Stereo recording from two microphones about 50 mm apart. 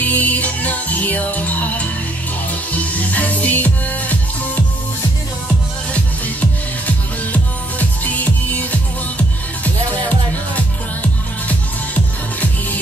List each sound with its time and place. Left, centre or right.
0.0 s music: left
6.9 s music: left
10.0 s music: left